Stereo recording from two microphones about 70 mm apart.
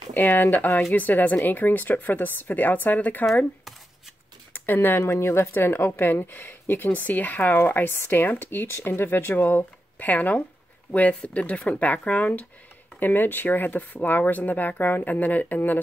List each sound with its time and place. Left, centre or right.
0.1 s speech: left
4.6 s speech: left